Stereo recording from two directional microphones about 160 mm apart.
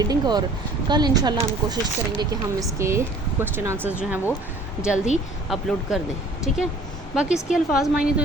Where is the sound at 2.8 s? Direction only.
15° right (ahead or behind).